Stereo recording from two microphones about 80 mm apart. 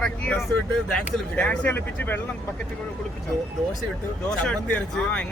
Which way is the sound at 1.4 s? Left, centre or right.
Left.